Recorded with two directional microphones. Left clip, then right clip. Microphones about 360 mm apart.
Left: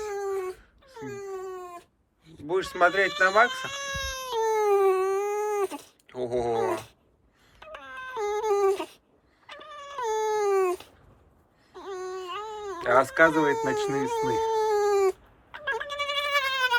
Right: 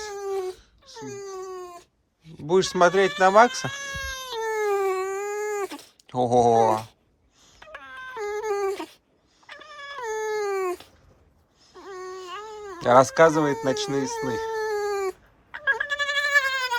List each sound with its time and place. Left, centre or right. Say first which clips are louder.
0.0 s a sound: left 2 dB; centre
0.9 s wail: right 1 dB; right
2.6 s speech: right 4 dB; centre
3.7 s baby cry: even; centre
7.6 s a sound: even; centre
9.5 s dog: right 2 dB; centre
11.7 s baby cry: left 2 dB; centre
12.8 s speech: right 4 dB; centre
14.0 s cat: left 2 dB; centre
15.5 s goat: right 6 dB; centre